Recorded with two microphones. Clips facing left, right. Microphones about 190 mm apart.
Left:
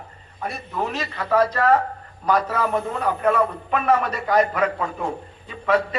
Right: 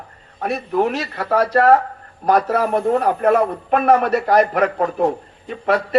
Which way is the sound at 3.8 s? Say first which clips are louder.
Right 6 dB; 65° right (ahead or behind).